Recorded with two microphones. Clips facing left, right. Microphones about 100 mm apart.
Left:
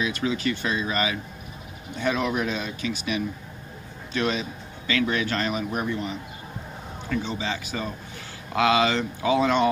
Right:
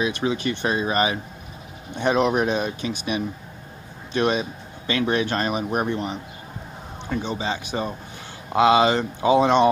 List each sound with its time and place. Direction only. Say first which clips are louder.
0.0 s speech: right 2 dB; 25° right (ahead or behind)
7.1 s speech: right 2 dB; 20° right (ahead or behind)